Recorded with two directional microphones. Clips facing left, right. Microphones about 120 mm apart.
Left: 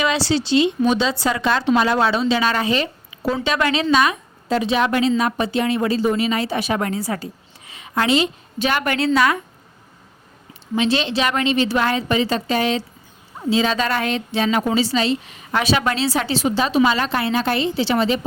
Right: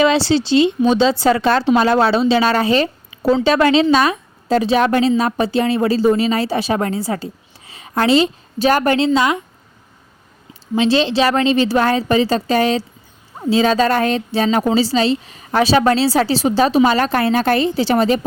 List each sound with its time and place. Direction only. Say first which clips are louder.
0.0 s a woman's voice: right 6 dB; 30° right (ahead or behind)
9.0 s a woman's voice: right 2 dB; 20° right (ahead or behind)
10.8 s a woman's voice: right 5 dB; 30° right (ahead or behind)